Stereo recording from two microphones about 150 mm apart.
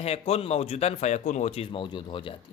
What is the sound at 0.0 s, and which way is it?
Speech, 40° left (ahead or behind).